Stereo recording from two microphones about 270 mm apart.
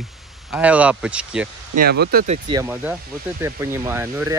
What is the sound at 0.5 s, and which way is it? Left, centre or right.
Speech, centre.